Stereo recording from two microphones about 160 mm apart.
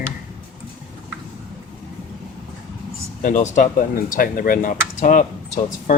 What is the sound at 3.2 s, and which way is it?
Speech, 55° left (ahead or behind).